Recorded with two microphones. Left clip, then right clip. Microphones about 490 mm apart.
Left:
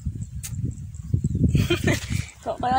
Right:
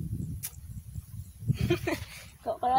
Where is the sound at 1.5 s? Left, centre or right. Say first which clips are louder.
Left 5 dB; right.